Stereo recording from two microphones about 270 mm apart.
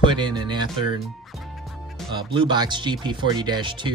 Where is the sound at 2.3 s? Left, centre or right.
Centre.